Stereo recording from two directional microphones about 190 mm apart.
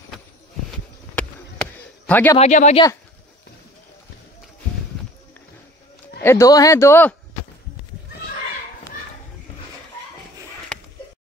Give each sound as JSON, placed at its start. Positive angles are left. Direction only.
{"t": 1.1, "sound": "a sound", "side_deg": 5}
{"t": 2.3, "sound": "speech", "side_deg": 35}
{"t": 6.2, "sound": "speech", "side_deg": 15}